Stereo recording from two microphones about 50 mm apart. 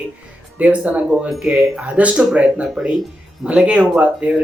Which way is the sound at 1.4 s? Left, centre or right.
Centre.